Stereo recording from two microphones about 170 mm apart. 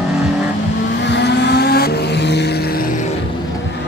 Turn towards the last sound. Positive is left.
turn(degrees=80)